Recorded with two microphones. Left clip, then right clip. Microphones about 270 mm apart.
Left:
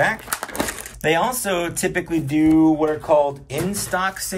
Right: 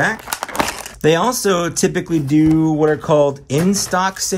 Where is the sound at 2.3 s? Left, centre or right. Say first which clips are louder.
Right 1 dB; right.